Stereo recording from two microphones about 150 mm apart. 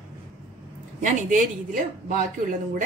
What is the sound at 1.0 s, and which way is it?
A woman's voice, 55° right (ahead or behind).